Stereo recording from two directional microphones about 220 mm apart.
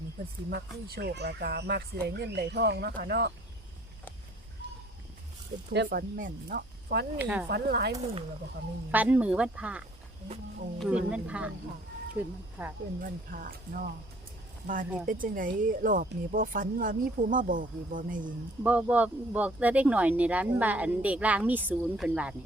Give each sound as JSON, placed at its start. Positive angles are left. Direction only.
{"t": 0.5, "sound": "speech", "side_deg": -50}
{"t": 5.7, "sound": "speech", "side_deg": -50}
{"t": 7.2, "sound": "speech", "side_deg": -5}
{"t": 7.5, "sound": "speech", "side_deg": -50}
{"t": 8.9, "sound": "speech", "side_deg": -10}
{"t": 13.0, "sound": "speech", "side_deg": -40}
{"t": 15.0, "sound": "speech", "side_deg": -40}
{"t": 18.6, "sound": "speech", "side_deg": -5}